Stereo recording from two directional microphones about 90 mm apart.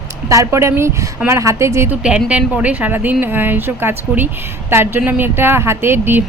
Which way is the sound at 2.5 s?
15° right (ahead or behind).